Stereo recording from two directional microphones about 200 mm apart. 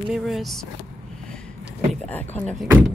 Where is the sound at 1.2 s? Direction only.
5° left (ahead or behind).